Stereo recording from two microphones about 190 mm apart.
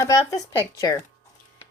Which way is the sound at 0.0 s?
15° left (ahead or behind).